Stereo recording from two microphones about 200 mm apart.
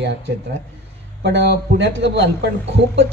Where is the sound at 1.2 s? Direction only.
60° right (ahead or behind).